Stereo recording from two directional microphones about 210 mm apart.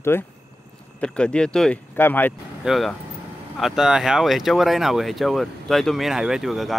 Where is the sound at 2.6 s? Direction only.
Centre (ahead or behind).